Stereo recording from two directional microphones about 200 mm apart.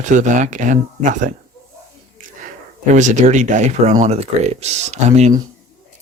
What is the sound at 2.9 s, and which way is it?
Speech, 40° right (ahead or behind).